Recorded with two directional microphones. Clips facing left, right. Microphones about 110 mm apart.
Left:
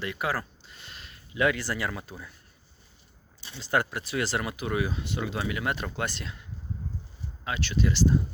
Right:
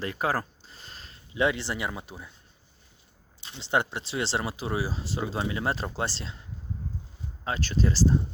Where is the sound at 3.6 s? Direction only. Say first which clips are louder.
Even; 25° right (ahead or behind).